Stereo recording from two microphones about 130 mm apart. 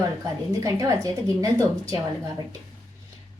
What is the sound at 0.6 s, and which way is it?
A woman's voice, 25° right (ahead or behind).